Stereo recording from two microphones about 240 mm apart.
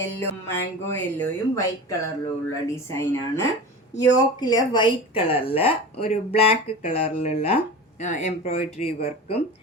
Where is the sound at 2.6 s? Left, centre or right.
Centre.